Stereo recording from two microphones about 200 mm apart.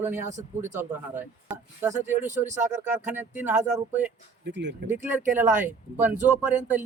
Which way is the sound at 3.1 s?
10° right (ahead or behind).